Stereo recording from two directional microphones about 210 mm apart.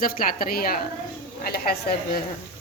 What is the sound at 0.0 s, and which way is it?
A woman's voice, 40° left (ahead or behind).